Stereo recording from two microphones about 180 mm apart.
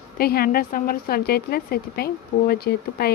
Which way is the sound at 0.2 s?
55° left (ahead or behind).